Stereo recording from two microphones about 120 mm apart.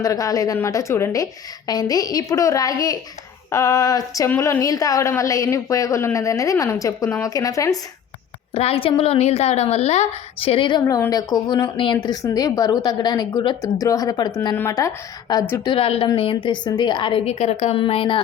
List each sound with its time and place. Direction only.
0.0 s a woman's voice: 30° left (ahead or behind)
8.5 s a woman's voice: 55° left (ahead or behind); by 14.5 s 35° left (ahead or behind)
14.5 s a woman's voice: 25° left (ahead or behind)
15.7 s a woman's voice: 50° left (ahead or behind)
17.2 s a woman's voice: 70° left (ahead or behind)
17.7 s a woman's voice: 50° left (ahead or behind)